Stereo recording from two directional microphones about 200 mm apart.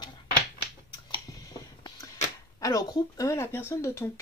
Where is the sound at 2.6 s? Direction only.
15° left (ahead or behind).